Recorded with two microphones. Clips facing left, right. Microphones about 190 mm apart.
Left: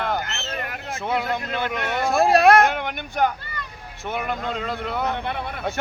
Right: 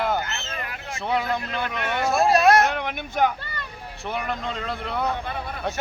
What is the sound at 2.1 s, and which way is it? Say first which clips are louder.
Speech: left 2 dB; 60° left (ahead or behind).